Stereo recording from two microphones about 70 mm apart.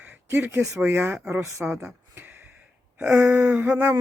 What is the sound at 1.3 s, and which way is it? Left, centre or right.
Speech, right.